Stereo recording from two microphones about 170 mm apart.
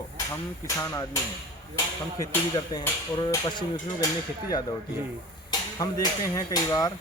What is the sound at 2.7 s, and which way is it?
Speech, 25° left (ahead or behind).